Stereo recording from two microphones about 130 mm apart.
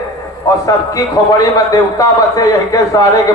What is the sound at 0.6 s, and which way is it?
A man's voice, 25° left (ahead or behind).